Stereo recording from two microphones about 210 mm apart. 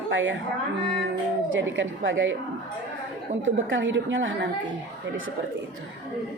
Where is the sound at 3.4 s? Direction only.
65° right (ahead or behind).